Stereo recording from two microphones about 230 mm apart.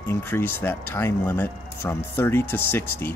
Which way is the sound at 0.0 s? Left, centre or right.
Centre.